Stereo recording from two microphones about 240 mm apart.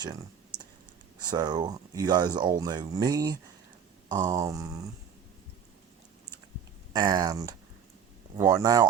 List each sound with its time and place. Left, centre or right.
0.0 s clicking: centre
1.3 s speech: centre
6.9 s speech: centre